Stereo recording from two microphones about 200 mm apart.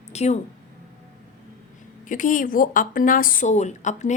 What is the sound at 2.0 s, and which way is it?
Speech, 40° left (ahead or behind).